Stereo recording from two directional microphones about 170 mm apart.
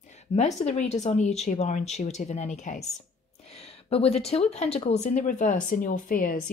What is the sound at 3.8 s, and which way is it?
Speech, 35° left (ahead or behind).